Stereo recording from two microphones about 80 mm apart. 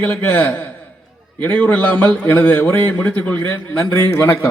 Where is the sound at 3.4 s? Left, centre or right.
Left.